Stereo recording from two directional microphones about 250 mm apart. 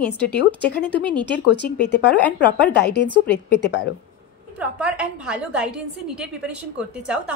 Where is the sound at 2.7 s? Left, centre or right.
Left.